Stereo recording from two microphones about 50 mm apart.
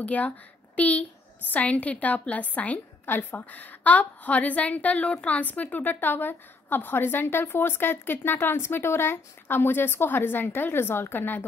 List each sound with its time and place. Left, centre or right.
0.0 s a woman's voice: left